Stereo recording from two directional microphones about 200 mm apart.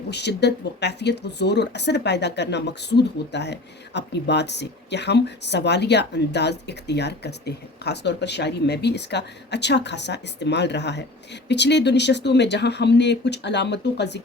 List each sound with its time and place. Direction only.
0.1 s speech: 55° left (ahead or behind)